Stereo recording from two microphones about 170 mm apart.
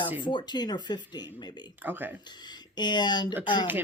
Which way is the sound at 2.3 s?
25° left (ahead or behind).